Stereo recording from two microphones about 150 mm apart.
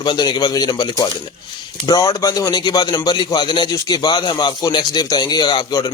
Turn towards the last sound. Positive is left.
turn(degrees=25)  # may be behind; listen again after turning